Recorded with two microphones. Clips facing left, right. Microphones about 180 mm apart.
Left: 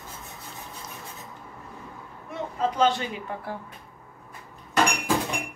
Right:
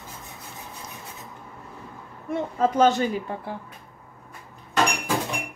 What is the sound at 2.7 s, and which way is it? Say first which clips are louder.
Speech: right 4 dB; 45° right (ahead or behind).